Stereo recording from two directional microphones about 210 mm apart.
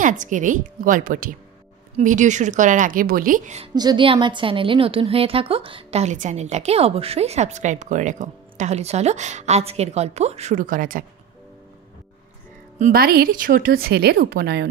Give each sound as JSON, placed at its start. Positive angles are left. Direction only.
{"t": 0.0, "sound": "a woman's voice", "side_deg": -35}
{"t": 3.7, "sound": "a woman's voice", "side_deg": -20}
{"t": 12.7, "sound": "a woman's voice", "side_deg": -40}